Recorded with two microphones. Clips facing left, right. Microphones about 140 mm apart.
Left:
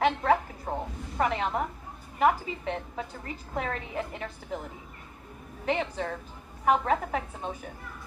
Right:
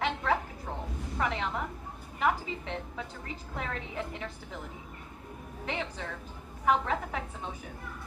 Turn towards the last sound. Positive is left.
turn(degrees=45)  # may be behind; listen again after turning